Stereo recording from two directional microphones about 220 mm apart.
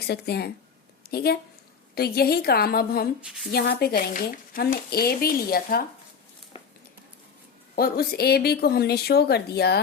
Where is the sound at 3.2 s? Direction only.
Centre (ahead or behind).